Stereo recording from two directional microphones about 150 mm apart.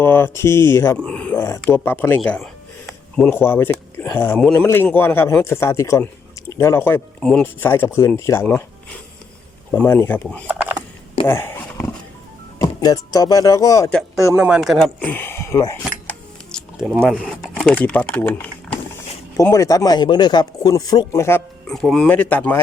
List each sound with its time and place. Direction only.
0.0 s a man's voice: 15° left (ahead or behind)
7.2 s speech: 5° left (ahead or behind)
7.4 s a man's voice: 15° left (ahead or behind)
9.7 s a man's voice: 15° left (ahead or behind)
10.5 s a sound: 10° right (ahead or behind)
11.3 s a sound: 15° left (ahead or behind)
12.5 s speech: 25° left (ahead or behind)
14.3 s speech: 5° right (ahead or behind)
14.9 s speech: 10° left (ahead or behind)
16.8 s speech: 5° right (ahead or behind)
17.5 s a man's voice: 10° left (ahead or behind)
19.4 s speech: 20° left (ahead or behind)
21.7 s a man's voice: centre (ahead or behind)